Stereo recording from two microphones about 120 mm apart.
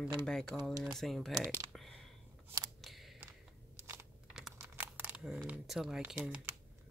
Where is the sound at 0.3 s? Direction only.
5° left (ahead or behind).